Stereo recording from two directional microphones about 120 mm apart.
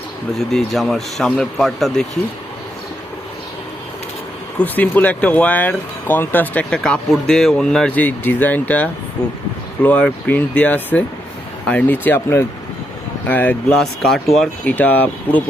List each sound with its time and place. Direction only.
0.3 s a man's voice: centre (ahead or behind)
4.5 s a man's voice: 15° left (ahead or behind)
14.7 s speech: 15° left (ahead or behind)